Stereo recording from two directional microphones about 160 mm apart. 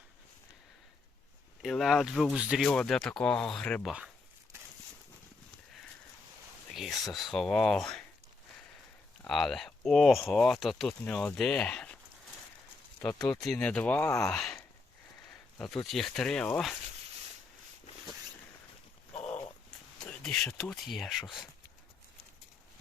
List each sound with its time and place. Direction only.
1.6 s speech: centre (ahead or behind)
6.7 s speech: centre (ahead or behind)
9.2 s speech: centre (ahead or behind)
13.0 s speech: 20° left (ahead or behind)
13.4 s speech: 5° left (ahead or behind)
14.3 s speech: 5° left (ahead or behind)
15.3 s a sound: 5° left (ahead or behind)
15.9 s speech: centre (ahead or behind)
20.1 s a sound: 5° left (ahead or behind)
20.5 s speech: centre (ahead or behind)